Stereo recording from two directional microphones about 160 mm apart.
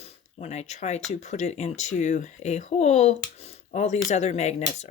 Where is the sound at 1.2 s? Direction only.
45° left (ahead or behind).